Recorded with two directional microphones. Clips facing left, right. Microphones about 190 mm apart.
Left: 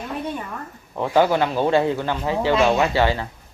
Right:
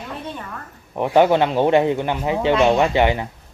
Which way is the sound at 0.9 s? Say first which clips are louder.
Right 3 dB; 20° right (ahead or behind).